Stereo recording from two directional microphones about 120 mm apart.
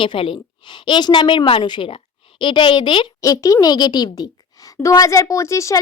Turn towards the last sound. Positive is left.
turn(degrees=25)  # may be behind; listen again after turning